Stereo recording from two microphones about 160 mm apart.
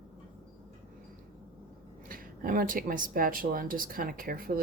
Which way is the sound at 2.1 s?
60° right (ahead or behind).